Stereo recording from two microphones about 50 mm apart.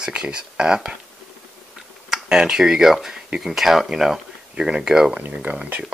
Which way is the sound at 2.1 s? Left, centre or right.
Centre.